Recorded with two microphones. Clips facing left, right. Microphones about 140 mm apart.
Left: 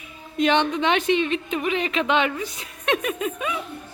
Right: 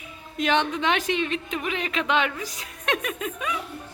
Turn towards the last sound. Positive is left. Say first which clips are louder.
# left 3 dB
turn(degrees=5)  # may be behind; listen again after turning